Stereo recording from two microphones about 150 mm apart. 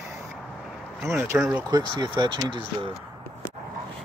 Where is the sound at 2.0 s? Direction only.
30° right (ahead or behind).